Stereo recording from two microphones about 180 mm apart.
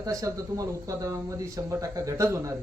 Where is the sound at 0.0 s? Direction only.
20° right (ahead or behind).